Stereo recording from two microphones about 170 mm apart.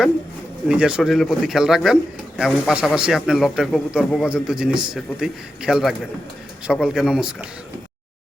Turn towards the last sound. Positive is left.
turn(degrees=-5)  # may be behind; listen again after turning